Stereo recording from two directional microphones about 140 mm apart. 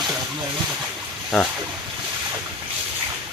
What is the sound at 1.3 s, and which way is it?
Speech, centre (ahead or behind).